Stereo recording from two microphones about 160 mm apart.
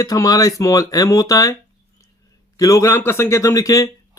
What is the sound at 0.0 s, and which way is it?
Speech, 20° left (ahead or behind).